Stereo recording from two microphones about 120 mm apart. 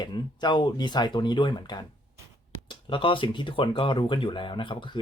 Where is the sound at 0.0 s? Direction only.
40° left (ahead or behind).